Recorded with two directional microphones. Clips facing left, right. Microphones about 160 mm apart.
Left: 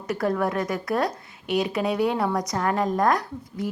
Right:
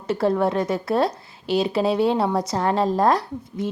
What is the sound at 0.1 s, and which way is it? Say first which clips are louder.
A woman's voice: right 4 dB; 25° right (ahead or behind).